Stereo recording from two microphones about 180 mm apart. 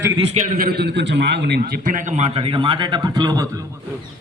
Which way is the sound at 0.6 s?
60° right (ahead or behind).